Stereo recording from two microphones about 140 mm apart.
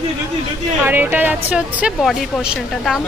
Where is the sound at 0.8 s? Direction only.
15° right (ahead or behind).